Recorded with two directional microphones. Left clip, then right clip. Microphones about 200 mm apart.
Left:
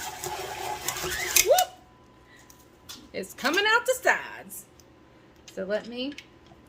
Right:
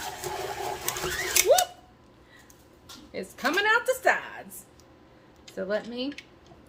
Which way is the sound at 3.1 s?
15° left (ahead or behind).